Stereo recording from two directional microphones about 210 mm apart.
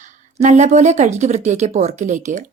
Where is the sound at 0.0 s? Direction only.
35° right (ahead or behind).